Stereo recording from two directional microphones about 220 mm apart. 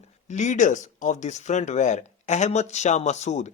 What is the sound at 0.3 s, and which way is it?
A man's voice, 35° left (ahead or behind).